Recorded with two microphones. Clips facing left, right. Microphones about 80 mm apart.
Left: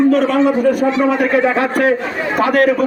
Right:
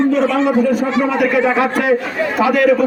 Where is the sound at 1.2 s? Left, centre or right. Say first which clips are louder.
Even; left.